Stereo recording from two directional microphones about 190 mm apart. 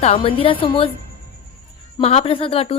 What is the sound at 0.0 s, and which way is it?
Speech, 30° left (ahead or behind).